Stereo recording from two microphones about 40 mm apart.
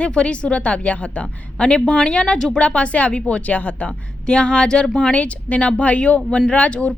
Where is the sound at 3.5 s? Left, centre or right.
Left.